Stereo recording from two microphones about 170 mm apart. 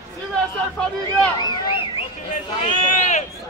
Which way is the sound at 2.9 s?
45° left (ahead or behind).